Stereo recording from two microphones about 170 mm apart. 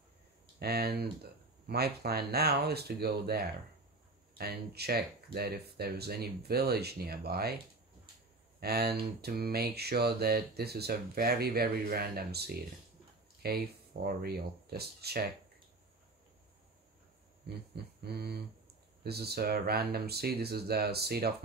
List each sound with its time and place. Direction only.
0.6 s speech: 70° right (ahead or behind)
17.7 s speech: 70° right (ahead or behind)